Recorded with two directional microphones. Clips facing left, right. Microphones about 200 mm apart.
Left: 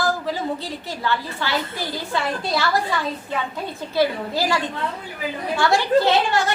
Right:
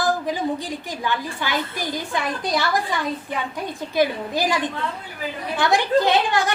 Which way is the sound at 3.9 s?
15° right (ahead or behind).